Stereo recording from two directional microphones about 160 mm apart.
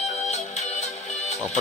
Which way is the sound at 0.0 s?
45° left (ahead or behind).